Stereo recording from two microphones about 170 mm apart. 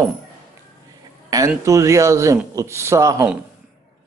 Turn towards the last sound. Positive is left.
turn(degrees=-15)  # may be behind; listen again after turning